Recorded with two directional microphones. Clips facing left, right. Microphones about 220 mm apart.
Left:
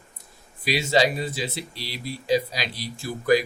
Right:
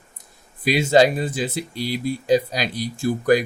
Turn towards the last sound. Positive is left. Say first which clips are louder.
# right 3 dB
turn(degrees=-50)  # may be behind; listen again after turning